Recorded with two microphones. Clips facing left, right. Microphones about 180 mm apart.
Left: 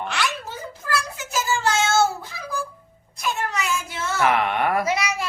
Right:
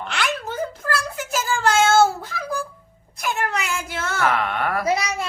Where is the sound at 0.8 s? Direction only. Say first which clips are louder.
Left 1 dB; 50° right (ahead or behind).